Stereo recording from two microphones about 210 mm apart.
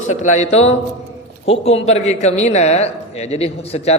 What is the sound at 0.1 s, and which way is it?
A man's voice, 35° left (ahead or behind).